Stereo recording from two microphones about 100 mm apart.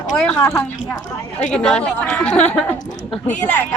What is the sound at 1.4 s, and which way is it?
A woman's voice, 10° left (ahead or behind).